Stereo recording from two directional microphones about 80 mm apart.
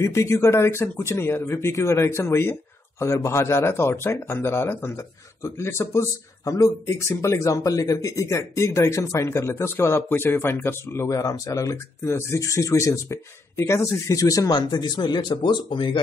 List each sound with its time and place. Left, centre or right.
0.0 s speech: left
14.5 s speech: left